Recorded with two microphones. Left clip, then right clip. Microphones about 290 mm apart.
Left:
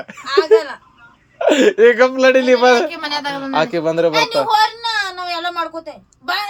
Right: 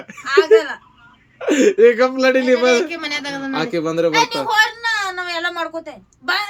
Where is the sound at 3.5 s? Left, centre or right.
Centre.